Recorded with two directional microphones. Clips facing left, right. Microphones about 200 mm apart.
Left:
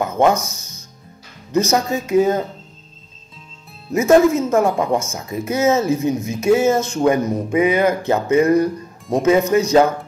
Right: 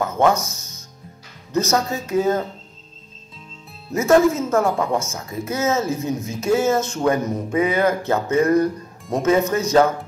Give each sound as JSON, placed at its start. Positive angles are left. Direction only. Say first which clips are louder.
{"t": 0.0, "sound": "speech", "louder": "left 2 dB", "side_deg": 15}
{"t": 1.5, "sound": "speech", "louder": "left 3 dB", "side_deg": 15}
{"t": 3.9, "sound": "speech", "louder": "left 3 dB", "side_deg": 15}